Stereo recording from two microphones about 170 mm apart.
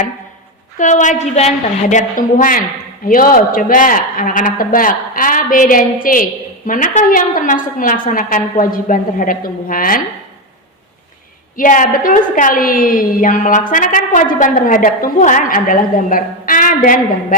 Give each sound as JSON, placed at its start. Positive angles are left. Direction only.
{"t": 0.8, "sound": "a woman's voice", "side_deg": 45}
{"t": 11.5, "sound": "a woman's voice", "side_deg": 50}